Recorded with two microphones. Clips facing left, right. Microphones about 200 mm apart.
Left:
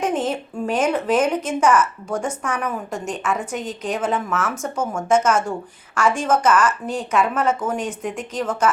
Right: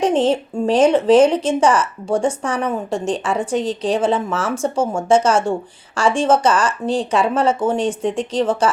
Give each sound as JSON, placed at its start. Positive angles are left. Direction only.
{"t": 0.0, "sound": "speech", "side_deg": -30}